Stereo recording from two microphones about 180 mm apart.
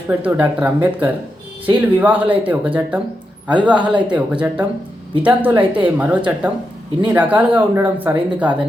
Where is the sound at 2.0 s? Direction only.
10° right (ahead or behind).